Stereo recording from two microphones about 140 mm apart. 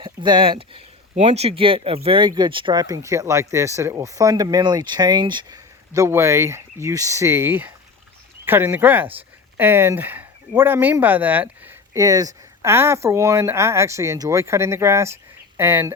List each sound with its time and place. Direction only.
0.0 s speech: 35° right (ahead or behind); by 16.0 s 15° right (ahead or behind)